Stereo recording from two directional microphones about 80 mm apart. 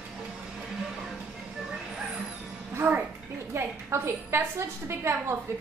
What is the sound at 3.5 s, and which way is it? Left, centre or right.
A woman's voice, right.